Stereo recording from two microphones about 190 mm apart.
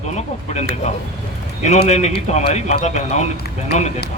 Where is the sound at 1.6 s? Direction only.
35° left (ahead or behind).